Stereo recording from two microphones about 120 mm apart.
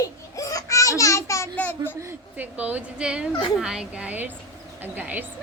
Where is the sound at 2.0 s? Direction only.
20° right (ahead or behind).